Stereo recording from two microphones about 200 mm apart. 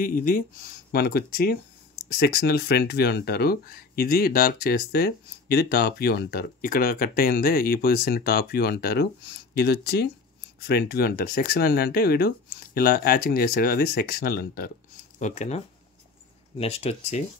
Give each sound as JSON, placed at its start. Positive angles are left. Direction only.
{"t": 0.0, "sound": "speech", "side_deg": 45}
{"t": 15.1, "sound": "speech", "side_deg": 35}